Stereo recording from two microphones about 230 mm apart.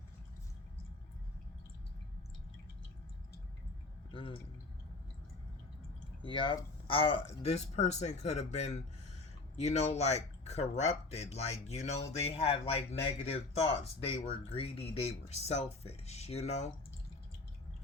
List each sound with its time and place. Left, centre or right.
4.1 s speech: left
6.2 s speech: left